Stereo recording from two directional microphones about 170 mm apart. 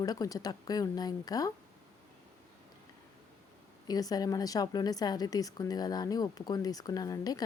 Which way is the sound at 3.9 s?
20° left (ahead or behind).